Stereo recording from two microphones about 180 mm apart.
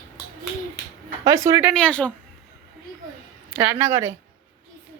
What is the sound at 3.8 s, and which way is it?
Speech, 15° right (ahead or behind).